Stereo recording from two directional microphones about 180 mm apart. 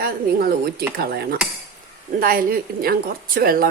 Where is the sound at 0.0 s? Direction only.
55° right (ahead or behind).